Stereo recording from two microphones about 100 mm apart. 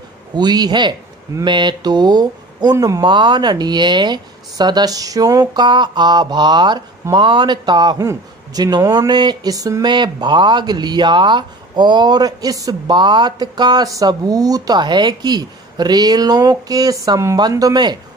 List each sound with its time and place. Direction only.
0.3 s speech: 45° right (ahead or behind)
8.0 s speech: 35° right (ahead or behind)
12.9 s speech: 50° right (ahead or behind)